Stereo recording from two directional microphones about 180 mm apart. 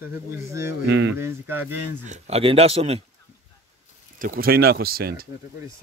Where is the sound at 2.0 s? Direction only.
40° right (ahead or behind).